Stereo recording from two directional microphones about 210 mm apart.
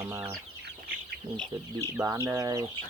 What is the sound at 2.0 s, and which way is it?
Speech, 15° right (ahead or behind).